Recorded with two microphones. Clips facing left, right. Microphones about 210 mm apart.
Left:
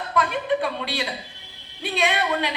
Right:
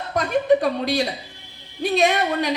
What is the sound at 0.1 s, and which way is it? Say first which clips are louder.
A woman's voice: right 6 dB; 40° right (ahead or behind).